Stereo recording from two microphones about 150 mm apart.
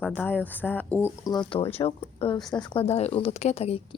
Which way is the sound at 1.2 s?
25° left (ahead or behind).